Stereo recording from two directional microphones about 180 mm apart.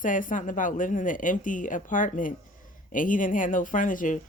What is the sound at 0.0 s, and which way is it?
Speech, 45° left (ahead or behind).